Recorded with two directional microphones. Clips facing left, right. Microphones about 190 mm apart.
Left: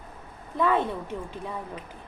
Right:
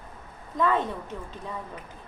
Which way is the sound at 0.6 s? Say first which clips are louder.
Left 1 dB; 10° left (ahead or behind).